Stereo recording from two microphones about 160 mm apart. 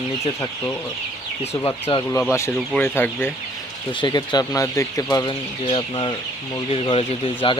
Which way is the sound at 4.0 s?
25° left (ahead or behind).